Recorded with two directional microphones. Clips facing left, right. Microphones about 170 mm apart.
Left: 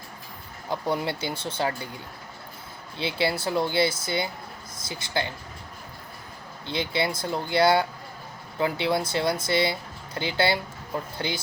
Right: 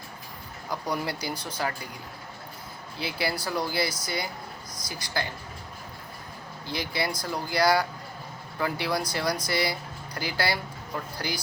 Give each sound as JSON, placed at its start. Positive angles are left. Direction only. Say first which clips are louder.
{"t": 0.7, "sound": "speech", "louder": "left 3 dB", "side_deg": 25}
{"t": 3.0, "sound": "speech", "louder": "left 4 dB", "side_deg": 25}
{"t": 6.7, "sound": "speech", "louder": "left 3 dB", "side_deg": 25}